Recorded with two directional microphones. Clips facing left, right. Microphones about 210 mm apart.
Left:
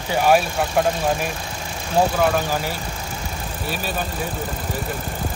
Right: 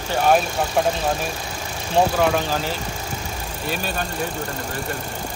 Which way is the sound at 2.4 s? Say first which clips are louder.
Even; 10° left (ahead or behind).